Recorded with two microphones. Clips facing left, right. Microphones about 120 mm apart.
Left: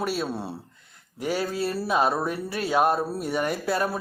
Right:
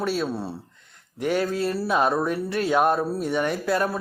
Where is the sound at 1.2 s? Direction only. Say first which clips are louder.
Right 3 dB; 30° left (ahead or behind).